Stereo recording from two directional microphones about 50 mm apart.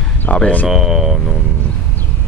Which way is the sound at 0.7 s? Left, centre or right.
Centre.